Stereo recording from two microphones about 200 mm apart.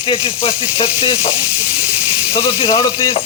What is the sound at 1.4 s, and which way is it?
Hiss, 5° right (ahead or behind).